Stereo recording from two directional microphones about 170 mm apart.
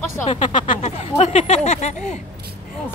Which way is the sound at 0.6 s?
40° left (ahead or behind).